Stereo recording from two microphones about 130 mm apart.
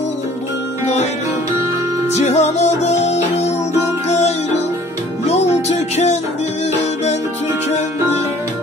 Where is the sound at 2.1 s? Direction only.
60° left (ahead or behind).